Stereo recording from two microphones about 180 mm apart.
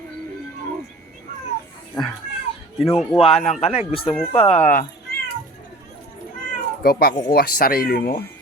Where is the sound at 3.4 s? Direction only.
40° left (ahead or behind).